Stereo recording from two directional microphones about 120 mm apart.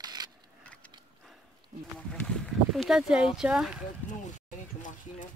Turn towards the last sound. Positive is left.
turn(degrees=-5)  # may be behind; listen again after turning